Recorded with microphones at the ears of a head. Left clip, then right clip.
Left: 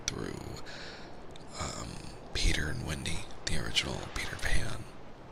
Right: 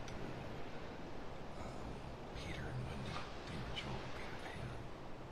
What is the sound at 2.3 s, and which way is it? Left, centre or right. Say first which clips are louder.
Speech: left 17 dB; left.